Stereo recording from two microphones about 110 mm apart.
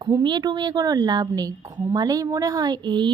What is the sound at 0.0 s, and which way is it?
A woman's voice, 45° right (ahead or behind).